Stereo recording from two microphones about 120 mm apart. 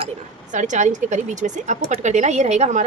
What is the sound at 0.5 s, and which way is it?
A woman's voice, 90° right.